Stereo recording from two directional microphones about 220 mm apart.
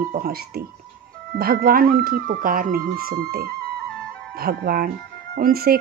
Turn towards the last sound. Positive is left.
turn(degrees=-45)  # may be behind; listen again after turning